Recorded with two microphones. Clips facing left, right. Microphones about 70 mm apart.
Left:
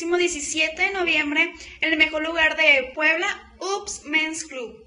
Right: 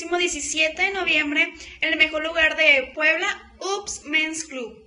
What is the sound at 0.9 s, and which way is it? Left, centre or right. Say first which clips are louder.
A woman's voice: even; left.